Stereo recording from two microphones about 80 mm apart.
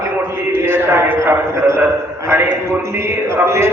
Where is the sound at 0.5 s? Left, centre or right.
Right.